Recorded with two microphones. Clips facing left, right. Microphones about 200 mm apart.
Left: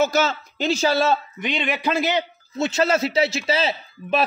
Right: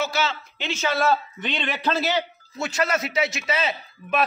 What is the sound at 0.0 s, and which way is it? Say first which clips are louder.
A woman's voice: left 6 dB; 45° left (ahead or behind).